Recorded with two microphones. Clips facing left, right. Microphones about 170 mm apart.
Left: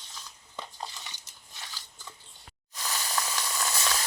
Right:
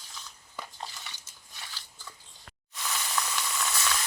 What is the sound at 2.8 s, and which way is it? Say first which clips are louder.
Sizzle: even; 35° left (ahead or behind).